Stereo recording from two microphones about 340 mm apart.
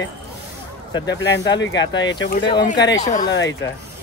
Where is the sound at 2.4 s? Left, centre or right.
Centre.